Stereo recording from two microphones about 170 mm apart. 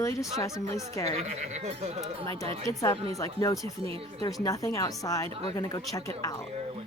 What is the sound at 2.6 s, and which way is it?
Speech, 20° left (ahead or behind).